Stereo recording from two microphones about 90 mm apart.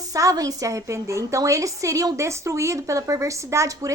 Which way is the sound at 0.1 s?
40° right (ahead or behind).